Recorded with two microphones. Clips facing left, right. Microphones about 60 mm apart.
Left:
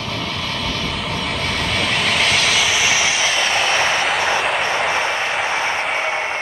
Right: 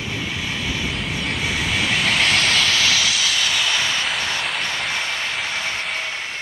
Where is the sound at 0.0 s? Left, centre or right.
Centre; by 4.0 s left.